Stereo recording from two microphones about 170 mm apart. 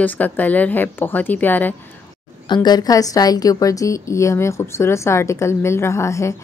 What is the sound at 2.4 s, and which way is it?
Speech, 25° left (ahead or behind).